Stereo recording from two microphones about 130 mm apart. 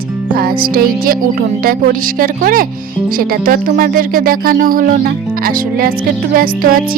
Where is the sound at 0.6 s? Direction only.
90° right.